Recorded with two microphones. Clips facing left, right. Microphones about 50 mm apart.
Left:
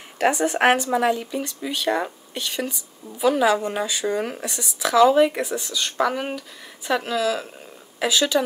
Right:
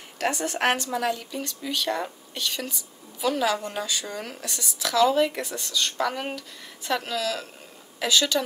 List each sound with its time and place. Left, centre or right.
0.2 s speech: left